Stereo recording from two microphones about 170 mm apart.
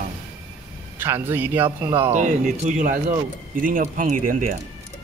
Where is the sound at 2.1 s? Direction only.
45° right (ahead or behind).